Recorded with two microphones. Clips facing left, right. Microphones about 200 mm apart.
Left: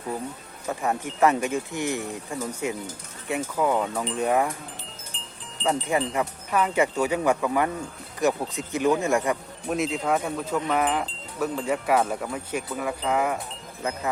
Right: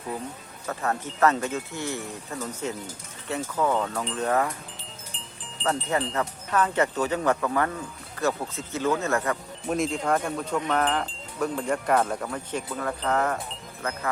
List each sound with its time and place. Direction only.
0.7 s speech: 15° left (ahead or behind)
5.6 s speech: 10° left (ahead or behind)
9.6 s speech: centre (ahead or behind); by 14.0 s 15° left (ahead or behind)